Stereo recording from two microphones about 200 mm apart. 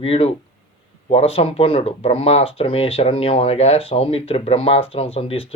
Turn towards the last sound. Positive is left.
turn(degrees=30)  # may be behind; listen again after turning